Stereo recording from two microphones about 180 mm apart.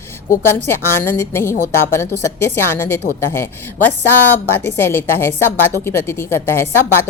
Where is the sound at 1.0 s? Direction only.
10° left (ahead or behind).